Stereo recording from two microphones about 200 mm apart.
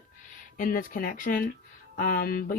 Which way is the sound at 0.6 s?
45° left (ahead or behind).